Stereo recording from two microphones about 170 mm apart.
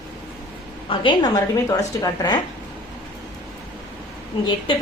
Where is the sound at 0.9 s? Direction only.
25° left (ahead or behind).